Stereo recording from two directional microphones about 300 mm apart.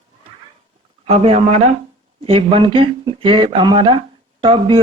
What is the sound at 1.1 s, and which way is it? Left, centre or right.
Speech, right.